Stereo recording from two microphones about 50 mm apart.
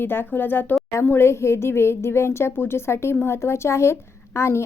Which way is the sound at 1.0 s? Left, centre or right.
Left.